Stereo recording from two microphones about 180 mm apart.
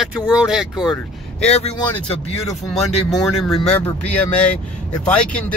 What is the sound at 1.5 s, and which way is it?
Speech, 35° left (ahead or behind).